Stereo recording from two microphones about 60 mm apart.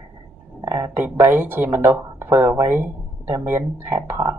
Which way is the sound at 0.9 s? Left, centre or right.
Right.